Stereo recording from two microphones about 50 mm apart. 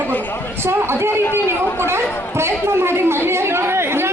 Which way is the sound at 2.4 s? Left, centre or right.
Right.